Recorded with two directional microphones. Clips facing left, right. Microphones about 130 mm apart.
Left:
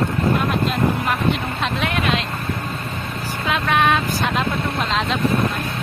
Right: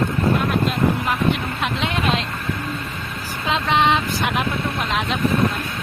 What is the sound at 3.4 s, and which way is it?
Speech, 25° right (ahead or behind).